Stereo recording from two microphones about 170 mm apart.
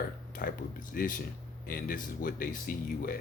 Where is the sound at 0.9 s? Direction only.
55° left (ahead or behind).